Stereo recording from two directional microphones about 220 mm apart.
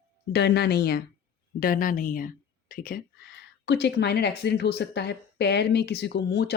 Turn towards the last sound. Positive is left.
turn(degrees=50)  # may be behind; listen again after turning